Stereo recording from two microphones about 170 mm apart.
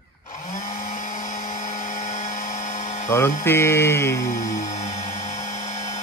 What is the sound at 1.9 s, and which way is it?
Helicopter, 45° left (ahead or behind).